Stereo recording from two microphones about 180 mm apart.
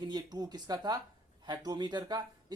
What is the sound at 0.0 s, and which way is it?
A man's voice, 25° right (ahead or behind).